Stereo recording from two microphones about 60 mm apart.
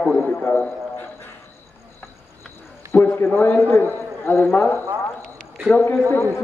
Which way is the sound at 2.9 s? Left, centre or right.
Left.